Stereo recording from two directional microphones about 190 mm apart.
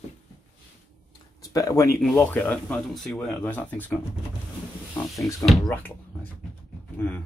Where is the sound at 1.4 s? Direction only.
15° left (ahead or behind).